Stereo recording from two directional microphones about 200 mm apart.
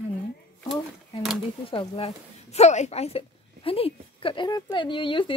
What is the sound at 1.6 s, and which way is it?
Speech, 25° left (ahead or behind).